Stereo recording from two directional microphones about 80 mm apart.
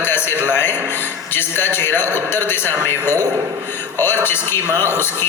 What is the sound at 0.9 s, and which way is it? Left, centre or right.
A man's voice, left.